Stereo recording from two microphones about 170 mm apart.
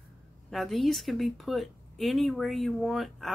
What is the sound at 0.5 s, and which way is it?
Speech, centre (ahead or behind).